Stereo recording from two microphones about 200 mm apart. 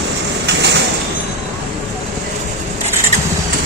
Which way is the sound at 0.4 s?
60° right (ahead or behind).